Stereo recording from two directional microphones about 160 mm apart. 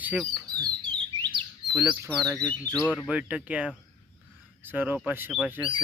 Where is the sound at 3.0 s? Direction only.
10° right (ahead or behind).